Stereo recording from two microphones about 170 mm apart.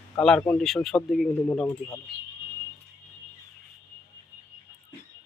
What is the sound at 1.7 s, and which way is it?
Speech, 15° left (ahead or behind).